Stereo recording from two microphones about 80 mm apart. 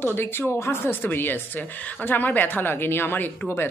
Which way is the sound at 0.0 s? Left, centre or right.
Left.